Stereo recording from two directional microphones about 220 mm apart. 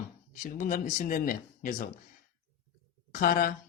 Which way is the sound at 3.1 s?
40° left (ahead or behind).